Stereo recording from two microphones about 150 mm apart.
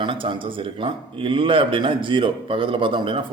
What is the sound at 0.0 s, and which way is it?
Speech, 35° right (ahead or behind).